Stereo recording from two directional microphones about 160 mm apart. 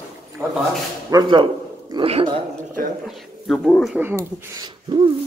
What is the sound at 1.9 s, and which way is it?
Speech, 35° right (ahead or behind).